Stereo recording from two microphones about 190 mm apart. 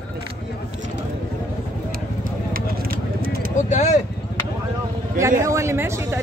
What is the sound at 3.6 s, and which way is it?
Speech, 40° left (ahead or behind).